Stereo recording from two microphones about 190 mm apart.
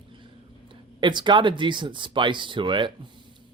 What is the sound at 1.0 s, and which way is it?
Speech, 25° right (ahead or behind).